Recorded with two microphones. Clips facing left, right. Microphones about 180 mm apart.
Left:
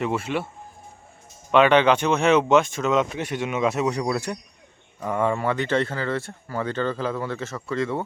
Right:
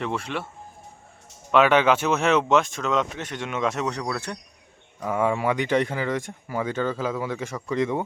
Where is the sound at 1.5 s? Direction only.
5° right (ahead or behind); by 4.3 s 10° left (ahead or behind).